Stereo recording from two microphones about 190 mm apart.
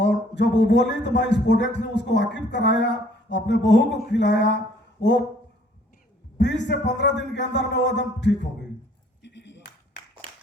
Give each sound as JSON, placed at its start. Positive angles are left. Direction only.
{"t": 0.0, "sound": "speech", "side_deg": 65}
{"t": 6.3, "sound": "speech", "side_deg": 65}
{"t": 9.2, "sound": "ping", "side_deg": 65}